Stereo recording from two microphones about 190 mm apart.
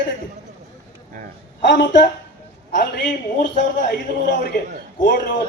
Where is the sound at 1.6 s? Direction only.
70° left (ahead or behind).